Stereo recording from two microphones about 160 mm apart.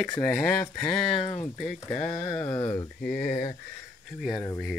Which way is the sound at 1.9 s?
45° left (ahead or behind).